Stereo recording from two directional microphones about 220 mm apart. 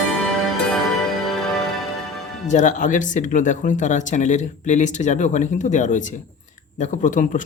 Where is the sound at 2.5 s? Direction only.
35° left (ahead or behind).